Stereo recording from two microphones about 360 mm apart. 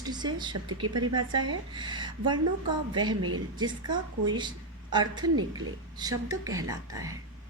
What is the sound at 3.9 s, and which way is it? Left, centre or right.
Speech, right.